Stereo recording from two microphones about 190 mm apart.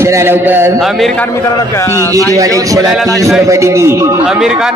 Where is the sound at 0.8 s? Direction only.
Centre (ahead or behind).